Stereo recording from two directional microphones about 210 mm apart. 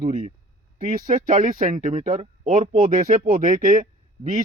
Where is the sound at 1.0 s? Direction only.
40° right (ahead or behind).